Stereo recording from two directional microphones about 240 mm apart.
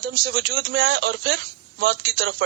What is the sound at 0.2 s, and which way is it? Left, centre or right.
A man's voice, right.